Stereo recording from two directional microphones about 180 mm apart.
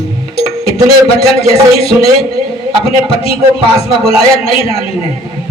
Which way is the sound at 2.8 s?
30° left (ahead or behind).